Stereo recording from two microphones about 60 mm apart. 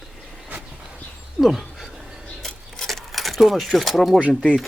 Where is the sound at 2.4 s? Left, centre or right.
Centre.